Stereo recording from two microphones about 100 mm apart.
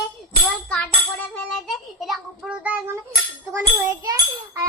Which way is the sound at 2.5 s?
15° right (ahead or behind).